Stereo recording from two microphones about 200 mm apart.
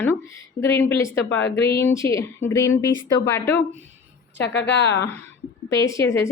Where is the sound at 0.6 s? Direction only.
10° left (ahead or behind).